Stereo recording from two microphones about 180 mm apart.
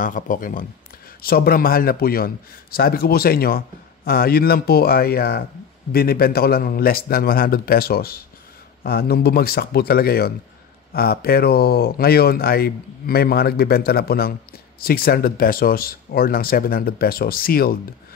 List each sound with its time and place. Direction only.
0.0 s a man's voice: 50° left (ahead or behind)